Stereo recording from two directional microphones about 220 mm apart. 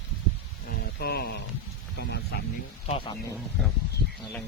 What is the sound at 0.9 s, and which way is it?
Speech, 45° left (ahead or behind).